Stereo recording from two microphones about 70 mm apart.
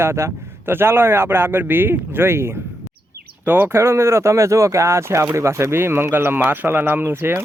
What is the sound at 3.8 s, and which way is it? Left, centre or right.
A man's voice, right.